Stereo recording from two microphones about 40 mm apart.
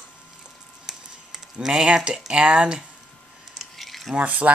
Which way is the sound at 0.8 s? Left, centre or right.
Centre.